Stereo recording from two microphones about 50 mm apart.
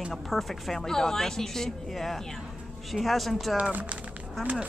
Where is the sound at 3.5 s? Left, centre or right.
Right.